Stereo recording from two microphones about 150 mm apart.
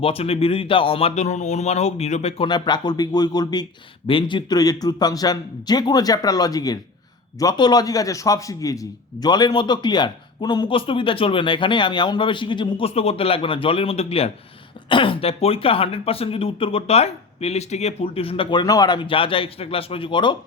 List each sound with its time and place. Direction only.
0.0 s a man's voice: 40° left (ahead or behind)
2.5 s a man's voice: 30° left (ahead or behind)